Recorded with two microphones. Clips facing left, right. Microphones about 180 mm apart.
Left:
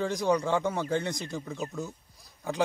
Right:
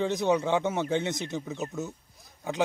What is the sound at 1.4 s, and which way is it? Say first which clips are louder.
Speech: right 2 dB; 5° right (ahead or behind).